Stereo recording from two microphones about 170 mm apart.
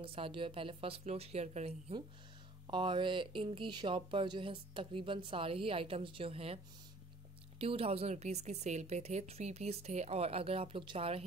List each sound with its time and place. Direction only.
0.0 s speech: 30° right (ahead or behind)